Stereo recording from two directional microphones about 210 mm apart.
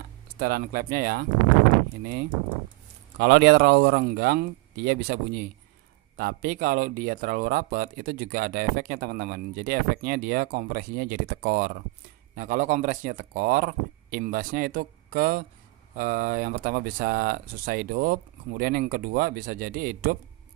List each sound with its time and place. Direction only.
0.4 s speech: 45° right (ahead or behind)
3.2 s speech: 50° right (ahead or behind)